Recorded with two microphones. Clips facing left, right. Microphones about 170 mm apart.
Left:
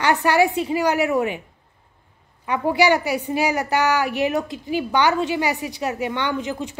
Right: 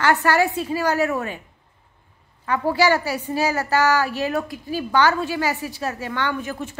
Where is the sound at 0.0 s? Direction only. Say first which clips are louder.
Left 1 dB; 15° left (ahead or behind).